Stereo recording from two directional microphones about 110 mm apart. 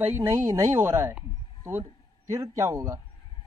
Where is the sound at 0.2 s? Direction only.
25° right (ahead or behind).